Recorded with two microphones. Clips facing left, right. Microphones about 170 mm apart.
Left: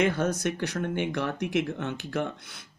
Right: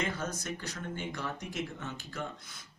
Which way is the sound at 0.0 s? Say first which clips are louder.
Left 10 dB; 75° left (ahead or behind).